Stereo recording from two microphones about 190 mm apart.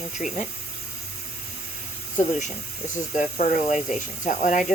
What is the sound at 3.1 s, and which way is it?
Speech, 40° left (ahead or behind).